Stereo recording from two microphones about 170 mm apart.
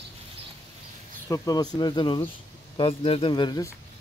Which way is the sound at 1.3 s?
20° left (ahead or behind).